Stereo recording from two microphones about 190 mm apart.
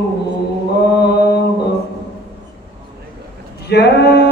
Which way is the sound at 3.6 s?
60° left (ahead or behind).